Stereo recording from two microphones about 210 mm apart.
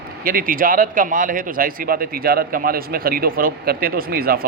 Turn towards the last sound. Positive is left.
turn(degrees=-45)  # may be behind; listen again after turning